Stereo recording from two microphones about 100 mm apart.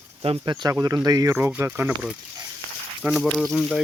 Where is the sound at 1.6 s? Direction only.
20° right (ahead or behind).